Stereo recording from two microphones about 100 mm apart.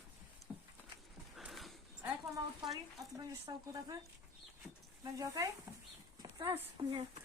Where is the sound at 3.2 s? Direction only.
40° right (ahead or behind).